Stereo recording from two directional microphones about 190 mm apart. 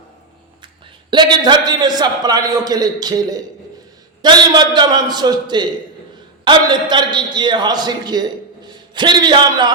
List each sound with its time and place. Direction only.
1.1 s a man's voice: 25° right (ahead or behind)